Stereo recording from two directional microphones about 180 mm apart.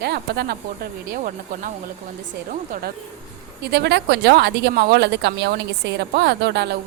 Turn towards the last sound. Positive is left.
turn(degrees=-70)  # may be behind; listen again after turning